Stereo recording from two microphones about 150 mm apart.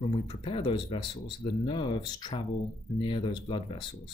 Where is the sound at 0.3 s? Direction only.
30° left (ahead or behind).